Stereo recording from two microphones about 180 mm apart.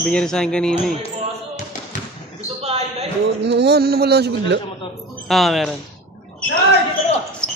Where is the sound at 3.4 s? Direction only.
70° right (ahead or behind).